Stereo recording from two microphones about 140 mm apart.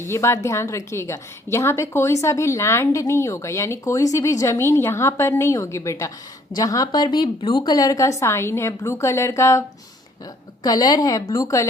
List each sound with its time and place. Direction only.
0.0 s a woman's voice: 20° left (ahead or behind)